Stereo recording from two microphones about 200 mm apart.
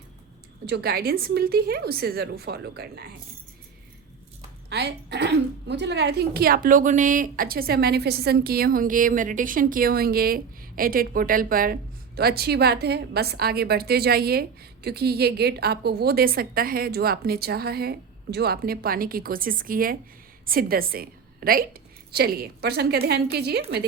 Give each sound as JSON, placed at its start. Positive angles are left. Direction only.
{"t": 0.6, "sound": "a woman's voice", "side_deg": -55}
{"t": 4.7, "sound": "a woman's voice", "side_deg": -55}